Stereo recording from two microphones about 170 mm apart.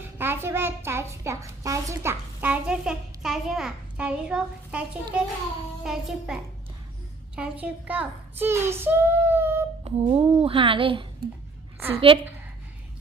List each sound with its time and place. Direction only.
0.2 s a woman's voice: 15° right (ahead or behind)
10.1 s a woman's voice: 30° right (ahead or behind)